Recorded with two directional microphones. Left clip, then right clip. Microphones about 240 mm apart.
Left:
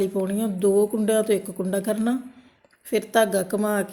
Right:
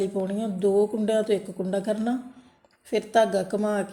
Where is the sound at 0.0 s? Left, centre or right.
Centre.